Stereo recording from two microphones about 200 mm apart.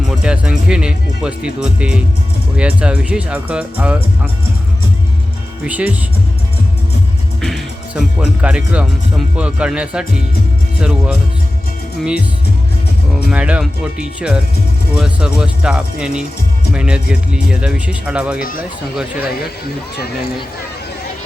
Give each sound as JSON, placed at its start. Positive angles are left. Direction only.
{"t": 0.0, "sound": "speech", "side_deg": -5}
{"t": 5.6, "sound": "speech", "side_deg": -5}
{"t": 7.4, "sound": "speech", "side_deg": 0}
{"t": 13.1, "sound": "speech", "side_deg": -5}
{"t": 18.3, "sound": "speech", "side_deg": 45}